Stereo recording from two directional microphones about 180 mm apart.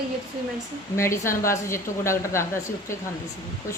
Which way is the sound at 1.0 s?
15° left (ahead or behind).